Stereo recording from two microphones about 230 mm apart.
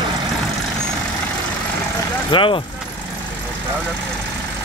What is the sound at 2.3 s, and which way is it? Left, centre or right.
Speech, left.